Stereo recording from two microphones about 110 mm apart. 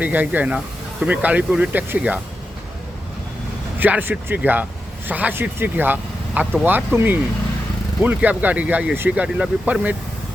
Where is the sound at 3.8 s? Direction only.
15° right (ahead or behind).